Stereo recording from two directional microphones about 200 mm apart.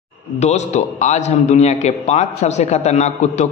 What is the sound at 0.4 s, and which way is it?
A man's voice, 35° left (ahead or behind).